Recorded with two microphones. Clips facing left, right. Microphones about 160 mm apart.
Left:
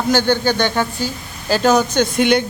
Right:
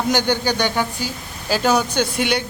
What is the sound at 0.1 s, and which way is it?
Speech, 15° right (ahead or behind).